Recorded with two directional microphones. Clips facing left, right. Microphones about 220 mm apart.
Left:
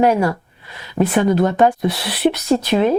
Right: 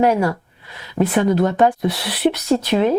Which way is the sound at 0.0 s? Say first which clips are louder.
Left 1 dB; 15° left (ahead or behind).